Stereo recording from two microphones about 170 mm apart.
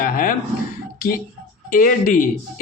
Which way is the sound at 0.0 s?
55° left (ahead or behind).